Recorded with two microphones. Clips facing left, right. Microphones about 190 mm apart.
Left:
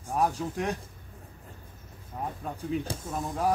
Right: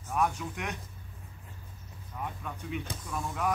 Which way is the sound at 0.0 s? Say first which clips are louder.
Left 3 dB; 35° left (ahead or behind).